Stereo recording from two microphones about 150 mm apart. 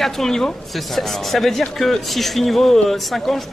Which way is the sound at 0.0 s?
5° left (ahead or behind).